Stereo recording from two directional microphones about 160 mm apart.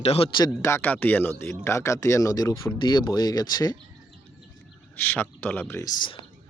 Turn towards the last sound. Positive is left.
turn(degrees=10)  # may be behind; listen again after turning